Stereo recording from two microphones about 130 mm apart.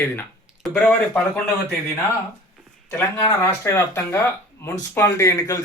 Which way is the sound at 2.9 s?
20° left (ahead or behind).